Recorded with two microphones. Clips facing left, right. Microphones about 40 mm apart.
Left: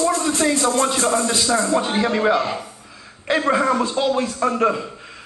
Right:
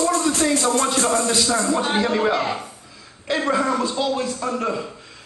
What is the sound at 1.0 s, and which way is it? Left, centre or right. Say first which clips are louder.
Speech: left 1 dB; centre.